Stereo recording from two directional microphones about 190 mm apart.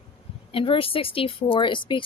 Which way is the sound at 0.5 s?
30° left (ahead or behind).